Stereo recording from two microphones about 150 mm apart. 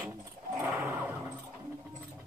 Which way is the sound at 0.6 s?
10° right (ahead or behind).